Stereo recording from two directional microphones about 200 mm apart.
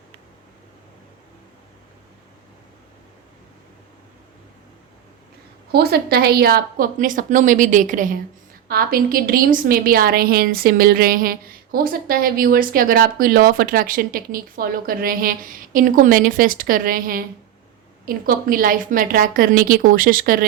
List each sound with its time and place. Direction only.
5.7 s a woman's voice: 50° right (ahead or behind)